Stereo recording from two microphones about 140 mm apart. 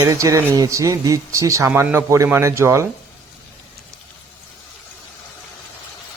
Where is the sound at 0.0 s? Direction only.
25° right (ahead or behind).